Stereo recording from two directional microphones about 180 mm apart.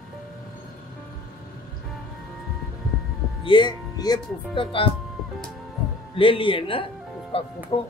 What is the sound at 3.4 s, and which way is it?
Speech, 25° left (ahead or behind).